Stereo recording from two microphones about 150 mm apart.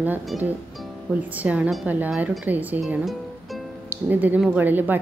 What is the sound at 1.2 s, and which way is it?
Speech, 10° right (ahead or behind).